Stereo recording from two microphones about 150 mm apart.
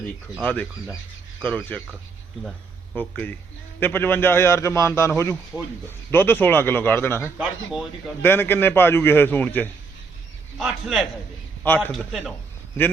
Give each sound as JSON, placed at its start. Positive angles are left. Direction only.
{"t": 0.4, "sound": "a man's voice", "side_deg": 10}
{"t": 2.9, "sound": "a man's voice", "side_deg": 10}
{"t": 7.3, "sound": "speech", "side_deg": -5}
{"t": 8.2, "sound": "a man's voice", "side_deg": 15}
{"t": 10.6, "sound": "speech", "side_deg": 0}
{"t": 11.6, "sound": "a man's voice", "side_deg": 10}
{"t": 11.9, "sound": "speech", "side_deg": 0}